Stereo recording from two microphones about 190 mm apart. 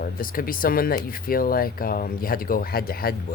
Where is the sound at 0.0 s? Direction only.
50° left (ahead or behind).